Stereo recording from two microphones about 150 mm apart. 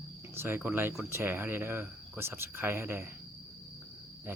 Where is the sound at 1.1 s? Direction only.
15° right (ahead or behind).